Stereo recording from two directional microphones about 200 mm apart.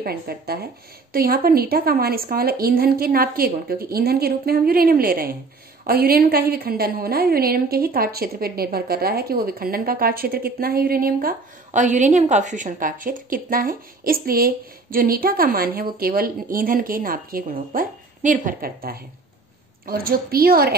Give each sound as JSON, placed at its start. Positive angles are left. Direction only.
{"t": 0.0, "sound": "a woman's voice", "side_deg": -50}